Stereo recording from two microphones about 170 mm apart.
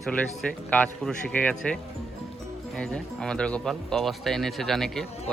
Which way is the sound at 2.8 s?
5° left (ahead or behind).